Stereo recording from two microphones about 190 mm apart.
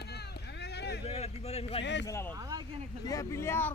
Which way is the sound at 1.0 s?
35° left (ahead or behind).